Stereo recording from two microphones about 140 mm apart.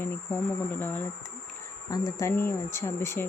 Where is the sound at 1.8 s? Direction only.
25° left (ahead or behind).